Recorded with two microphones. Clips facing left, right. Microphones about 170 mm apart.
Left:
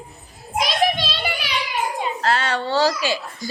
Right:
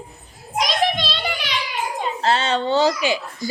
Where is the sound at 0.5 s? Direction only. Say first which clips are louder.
Even; 5° left (ahead or behind).